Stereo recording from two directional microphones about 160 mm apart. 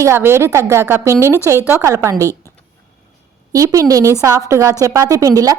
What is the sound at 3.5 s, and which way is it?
Speech, 20° right (ahead or behind).